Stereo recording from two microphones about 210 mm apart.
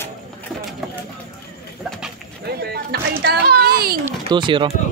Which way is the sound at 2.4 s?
50° right (ahead or behind).